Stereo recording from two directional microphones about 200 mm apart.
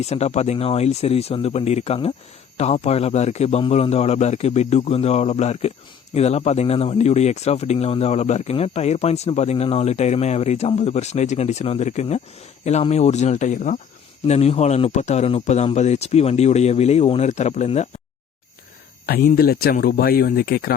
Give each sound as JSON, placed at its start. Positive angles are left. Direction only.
{"t": 0.0, "sound": "speech", "side_deg": 35}
{"t": 19.0, "sound": "speech", "side_deg": 50}